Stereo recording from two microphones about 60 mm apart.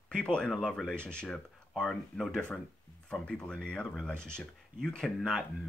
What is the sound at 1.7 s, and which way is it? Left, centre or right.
Speech, centre.